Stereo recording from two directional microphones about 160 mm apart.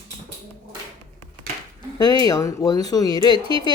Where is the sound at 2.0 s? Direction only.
25° left (ahead or behind).